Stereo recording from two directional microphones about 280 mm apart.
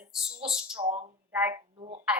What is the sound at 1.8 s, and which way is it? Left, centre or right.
Speech, right.